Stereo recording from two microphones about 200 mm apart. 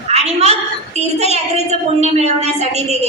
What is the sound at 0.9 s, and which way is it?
A woman's voice, 35° right (ahead or behind).